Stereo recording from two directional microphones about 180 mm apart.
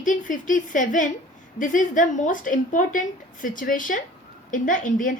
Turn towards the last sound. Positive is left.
turn(degrees=50)  # may be behind; listen again after turning